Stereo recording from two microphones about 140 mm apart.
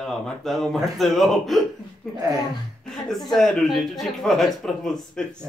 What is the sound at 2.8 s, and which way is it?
A woman's voice, centre (ahead or behind).